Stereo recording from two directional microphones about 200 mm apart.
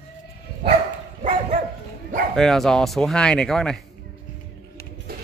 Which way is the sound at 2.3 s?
Centre (ahead or behind).